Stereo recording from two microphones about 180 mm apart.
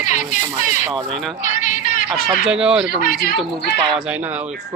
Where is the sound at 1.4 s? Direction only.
45° left (ahead or behind).